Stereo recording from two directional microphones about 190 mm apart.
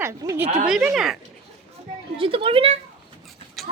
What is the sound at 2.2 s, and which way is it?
Speech, 30° right (ahead or behind).